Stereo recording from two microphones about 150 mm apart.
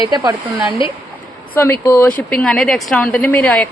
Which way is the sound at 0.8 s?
35° left (ahead or behind).